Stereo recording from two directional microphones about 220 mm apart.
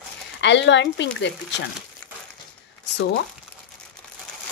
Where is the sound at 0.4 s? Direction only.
55° left (ahead or behind).